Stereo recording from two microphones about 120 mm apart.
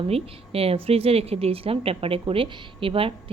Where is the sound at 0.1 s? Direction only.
55° right (ahead or behind).